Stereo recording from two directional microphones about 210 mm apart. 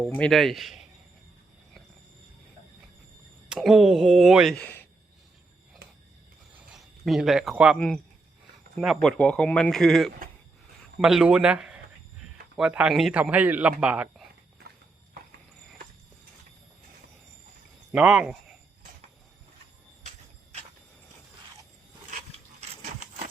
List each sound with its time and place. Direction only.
0.1 s speech: 5° left (ahead or behind)
3.5 s speech: centre (ahead or behind)
6.6 s a man's voice: centre (ahead or behind)
14.6 s horse: 50° right (ahead or behind)
17.9 s speech: 5° right (ahead or behind)
22.7 s a sound: 30° right (ahead or behind)